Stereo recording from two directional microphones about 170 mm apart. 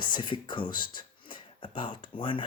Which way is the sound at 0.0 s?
30° left (ahead or behind).